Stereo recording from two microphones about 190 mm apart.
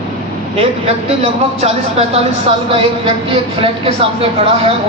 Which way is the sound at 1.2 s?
35° right (ahead or behind).